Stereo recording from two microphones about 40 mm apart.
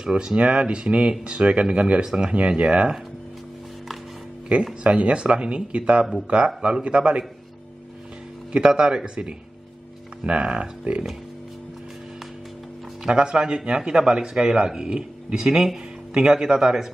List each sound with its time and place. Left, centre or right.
0.0 s speech: centre
4.5 s speech: right
8.5 s speech: right
13.0 s speech: right
15.4 s a man's voice: centre